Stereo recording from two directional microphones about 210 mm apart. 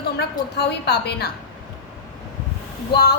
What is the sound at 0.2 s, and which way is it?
A woman's voice, 50° left (ahead or behind).